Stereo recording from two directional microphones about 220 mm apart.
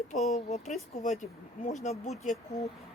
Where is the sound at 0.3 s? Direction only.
30° left (ahead or behind).